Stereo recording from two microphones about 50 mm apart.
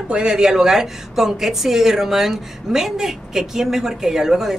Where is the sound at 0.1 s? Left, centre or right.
Centre.